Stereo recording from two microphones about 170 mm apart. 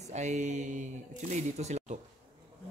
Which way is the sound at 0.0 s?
40° right (ahead or behind).